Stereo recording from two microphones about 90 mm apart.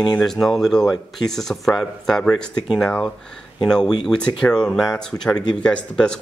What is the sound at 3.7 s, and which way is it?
Speech, 5° left (ahead or behind).